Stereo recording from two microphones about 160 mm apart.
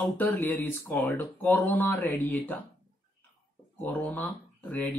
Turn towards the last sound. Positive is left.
turn(degrees=10)  # may be behind; listen again after turning